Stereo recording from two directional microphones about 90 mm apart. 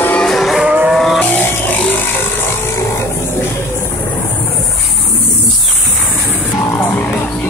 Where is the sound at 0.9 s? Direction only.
Centre (ahead or behind).